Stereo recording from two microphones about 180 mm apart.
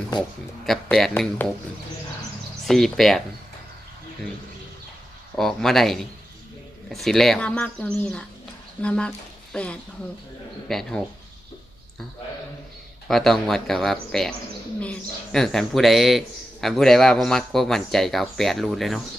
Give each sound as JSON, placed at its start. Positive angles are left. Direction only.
{"t": 0.6, "sound": "speech", "side_deg": 0}
{"t": 2.6, "sound": "speech", "side_deg": 0}
{"t": 5.4, "sound": "speech", "side_deg": 0}
{"t": 13.1, "sound": "speech", "side_deg": 0}